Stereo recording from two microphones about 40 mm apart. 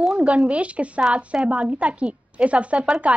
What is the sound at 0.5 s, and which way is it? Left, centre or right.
A woman's voice, right.